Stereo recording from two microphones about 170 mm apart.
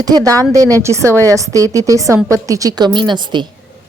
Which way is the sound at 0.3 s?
20° right (ahead or behind).